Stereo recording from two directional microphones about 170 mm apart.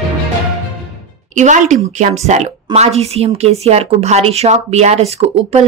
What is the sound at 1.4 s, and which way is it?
Speech, 45° right (ahead or behind).